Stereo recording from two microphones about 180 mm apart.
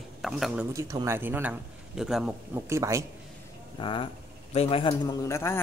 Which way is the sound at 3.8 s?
30° left (ahead or behind).